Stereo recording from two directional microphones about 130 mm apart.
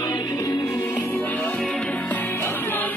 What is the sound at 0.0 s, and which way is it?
Music, 25° left (ahead or behind).